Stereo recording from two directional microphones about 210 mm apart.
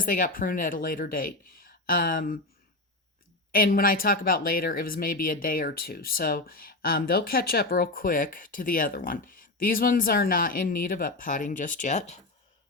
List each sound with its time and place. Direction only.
0.0 s speech: 40° left (ahead or behind)
3.5 s speech: 45° left (ahead or behind)